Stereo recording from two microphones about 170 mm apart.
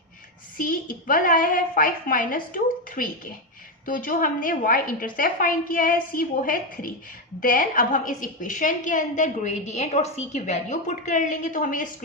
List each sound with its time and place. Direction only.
0.5 s a woman's voice: 55° left (ahead or behind)